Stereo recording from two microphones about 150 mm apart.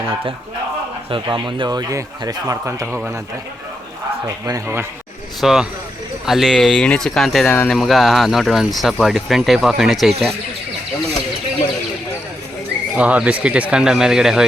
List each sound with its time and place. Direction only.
1.1 s speech: 35° right (ahead or behind)
4.4 s speech: 20° right (ahead or behind)
5.4 s speech: 5° right (ahead or behind)
7.4 s speech: 15° left (ahead or behind)
7.7 s speech: centre (ahead or behind)
13.0 s speech: 10° right (ahead or behind)